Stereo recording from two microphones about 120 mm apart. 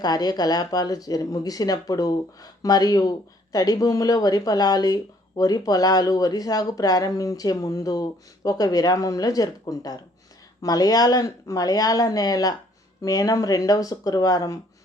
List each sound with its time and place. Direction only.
0.0 s speech: 35° left (ahead or behind)